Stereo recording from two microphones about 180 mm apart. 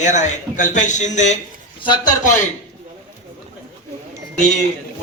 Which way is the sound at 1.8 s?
25° left (ahead or behind).